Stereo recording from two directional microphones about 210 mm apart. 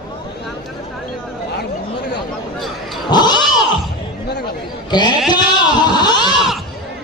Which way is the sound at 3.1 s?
20° left (ahead or behind).